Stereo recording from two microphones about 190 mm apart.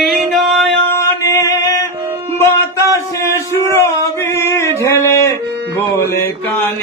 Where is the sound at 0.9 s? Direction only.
15° left (ahead or behind).